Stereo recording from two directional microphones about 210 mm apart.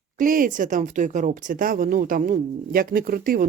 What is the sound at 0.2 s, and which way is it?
Speech, 40° right (ahead or behind).